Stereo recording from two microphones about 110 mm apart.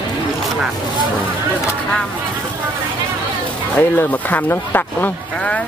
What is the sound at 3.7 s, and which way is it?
Speech, 15° left (ahead or behind).